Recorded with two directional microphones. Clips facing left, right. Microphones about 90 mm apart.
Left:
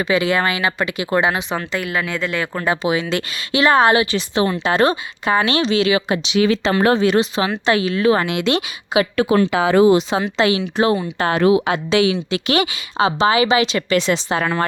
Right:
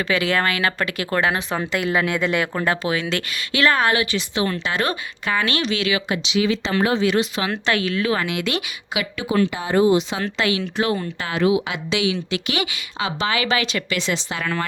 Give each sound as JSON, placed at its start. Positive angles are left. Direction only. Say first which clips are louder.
{"t": 0.0, "sound": "speech", "louder": "left 3 dB", "side_deg": 15}
{"t": 1.5, "sound": "speech", "louder": "even", "side_deg": -5}
{"t": 2.6, "sound": "speech", "louder": "left 3 dB", "side_deg": 20}
{"t": 6.2, "sound": "speech", "louder": "left 4 dB", "side_deg": 55}
{"t": 6.8, "sound": "a woman's voice", "louder": "left 4 dB", "side_deg": 45}
{"t": 9.5, "sound": "speech", "louder": "left 4 dB", "side_deg": 90}
{"t": 10.2, "sound": "speech", "louder": "left 5 dB", "side_deg": 25}
{"t": 11.2, "sound": "a woman's voice", "louder": "left 5 dB", "side_deg": 45}
{"t": 13.9, "sound": "a woman's voice", "louder": "left 10 dB", "side_deg": 45}